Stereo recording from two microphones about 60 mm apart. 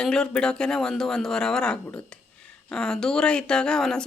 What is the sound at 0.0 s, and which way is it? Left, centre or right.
A woman's voice, centre.